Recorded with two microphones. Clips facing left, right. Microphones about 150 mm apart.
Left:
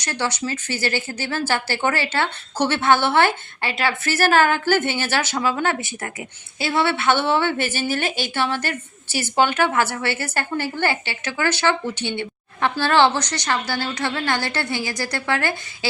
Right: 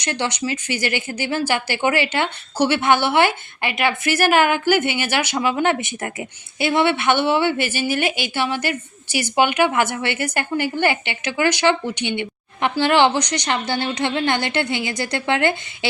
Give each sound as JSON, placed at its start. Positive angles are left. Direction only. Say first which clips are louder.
{"t": 0.0, "sound": "speech", "louder": "right 2 dB", "side_deg": -20}